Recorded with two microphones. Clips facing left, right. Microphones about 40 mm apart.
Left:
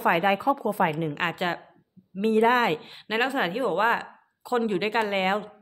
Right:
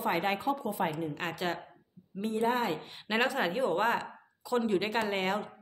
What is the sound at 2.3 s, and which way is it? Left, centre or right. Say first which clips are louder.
Speech: left 8 dB; left.